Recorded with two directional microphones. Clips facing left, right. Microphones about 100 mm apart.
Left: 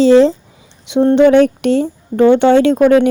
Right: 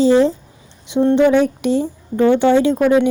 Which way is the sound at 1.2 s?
70° left (ahead or behind).